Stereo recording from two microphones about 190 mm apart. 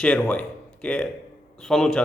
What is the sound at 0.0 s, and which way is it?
A man's voice, 5° left (ahead or behind).